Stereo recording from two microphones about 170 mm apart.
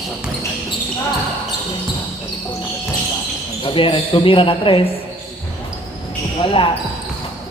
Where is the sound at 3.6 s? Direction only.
30° left (ahead or behind).